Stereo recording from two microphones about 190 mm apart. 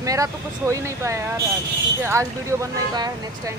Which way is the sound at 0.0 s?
15° right (ahead or behind).